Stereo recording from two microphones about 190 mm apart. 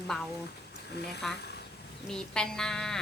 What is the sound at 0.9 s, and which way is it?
Speech, 60° left (ahead or behind).